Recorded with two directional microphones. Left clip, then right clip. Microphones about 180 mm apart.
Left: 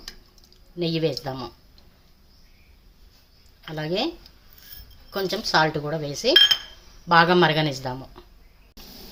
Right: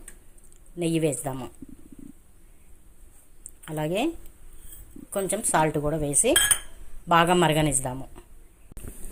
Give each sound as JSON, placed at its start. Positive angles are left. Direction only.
{"t": 0.8, "sound": "speech", "side_deg": -20}
{"t": 3.8, "sound": "speech", "side_deg": -20}
{"t": 5.1, "sound": "speech", "side_deg": -20}